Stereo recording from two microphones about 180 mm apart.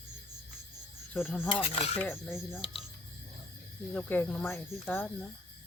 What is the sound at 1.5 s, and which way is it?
Speech, 35° left (ahead or behind).